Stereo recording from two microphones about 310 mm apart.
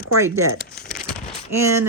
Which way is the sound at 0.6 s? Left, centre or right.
Left.